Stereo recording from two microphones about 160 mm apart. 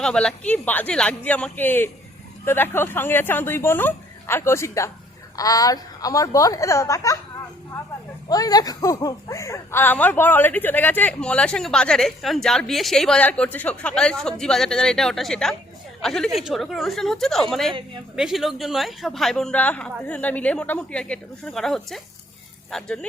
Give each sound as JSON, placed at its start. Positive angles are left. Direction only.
{"t": 0.0, "sound": "a woman's voice", "side_deg": 5}
{"t": 8.3, "sound": "a woman's voice", "side_deg": 25}